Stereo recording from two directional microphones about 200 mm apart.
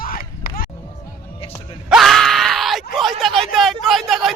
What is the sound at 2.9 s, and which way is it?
Speech, centre (ahead or behind).